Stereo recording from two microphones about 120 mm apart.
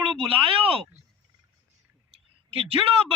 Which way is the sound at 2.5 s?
50° right (ahead or behind).